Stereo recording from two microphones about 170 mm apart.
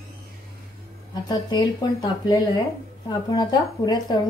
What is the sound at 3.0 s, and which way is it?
Speech, 25° left (ahead or behind).